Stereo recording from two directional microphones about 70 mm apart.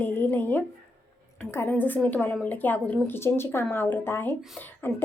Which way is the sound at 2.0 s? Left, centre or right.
Centre.